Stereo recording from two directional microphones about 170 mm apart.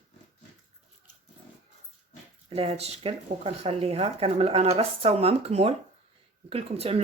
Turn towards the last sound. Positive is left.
turn(degrees=-35)  # may be behind; listen again after turning